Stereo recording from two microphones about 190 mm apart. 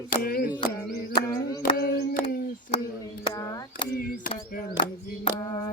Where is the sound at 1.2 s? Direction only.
20° left (ahead or behind).